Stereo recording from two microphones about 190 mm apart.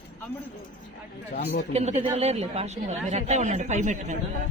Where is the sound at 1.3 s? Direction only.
45° left (ahead or behind).